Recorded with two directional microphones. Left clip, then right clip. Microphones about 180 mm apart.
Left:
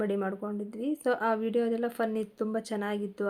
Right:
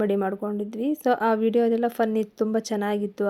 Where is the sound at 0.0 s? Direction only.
45° right (ahead or behind).